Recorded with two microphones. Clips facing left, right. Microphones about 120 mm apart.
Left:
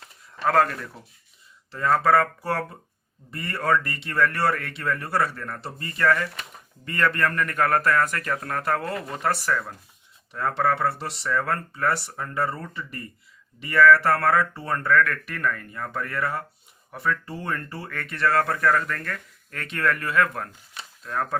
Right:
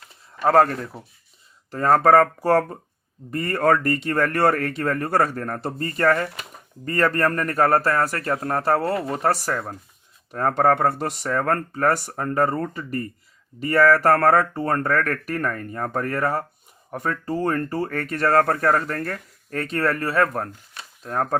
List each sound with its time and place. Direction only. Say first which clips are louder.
0.4 s speech: right 4 dB; 35° right (ahead or behind)
1.7 s speech: right 5 dB; 50° right (ahead or behind)